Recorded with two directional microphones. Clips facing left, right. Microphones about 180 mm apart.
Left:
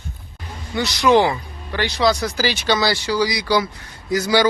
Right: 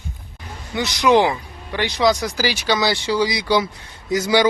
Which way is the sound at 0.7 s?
20° right (ahead or behind).